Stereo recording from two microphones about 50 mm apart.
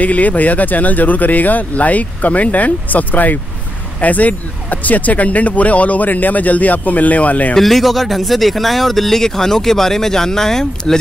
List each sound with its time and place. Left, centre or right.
0.0 s speech: left
7.5 s speech: centre